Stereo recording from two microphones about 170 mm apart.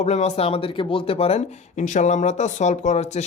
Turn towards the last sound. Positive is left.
turn(degrees=40)  # may be behind; listen again after turning